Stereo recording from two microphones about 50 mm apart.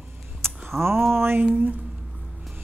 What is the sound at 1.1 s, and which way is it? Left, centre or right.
Speech, right.